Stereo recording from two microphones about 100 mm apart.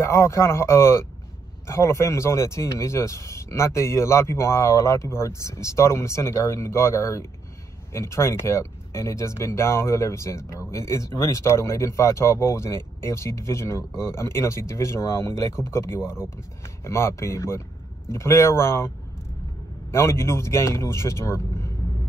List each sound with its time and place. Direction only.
0.0 s speech: 30° left (ahead or behind)
19.9 s speech: 25° left (ahead or behind)